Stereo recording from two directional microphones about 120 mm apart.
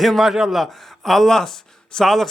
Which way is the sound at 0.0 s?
Centre (ahead or behind).